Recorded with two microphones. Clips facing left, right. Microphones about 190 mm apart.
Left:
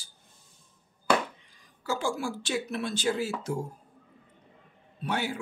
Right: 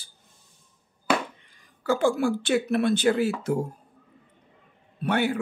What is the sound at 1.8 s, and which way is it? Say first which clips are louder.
Speech: right 8 dB; 60° right (ahead or behind).